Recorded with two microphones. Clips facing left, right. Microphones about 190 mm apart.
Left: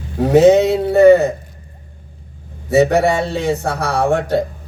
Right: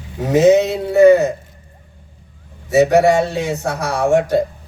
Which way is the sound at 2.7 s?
60° left (ahead or behind).